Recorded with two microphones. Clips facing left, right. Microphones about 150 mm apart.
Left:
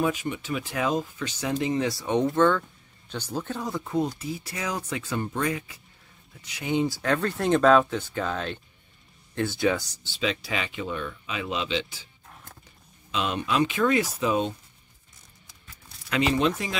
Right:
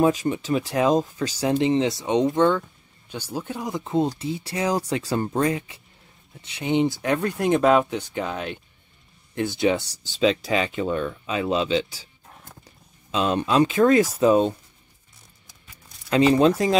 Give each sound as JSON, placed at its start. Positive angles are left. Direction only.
{"t": 0.0, "sound": "speech", "side_deg": -35}
{"t": 10.0, "sound": "speech", "side_deg": -40}
{"t": 13.1, "sound": "speech", "side_deg": -35}
{"t": 16.1, "sound": "speech", "side_deg": -35}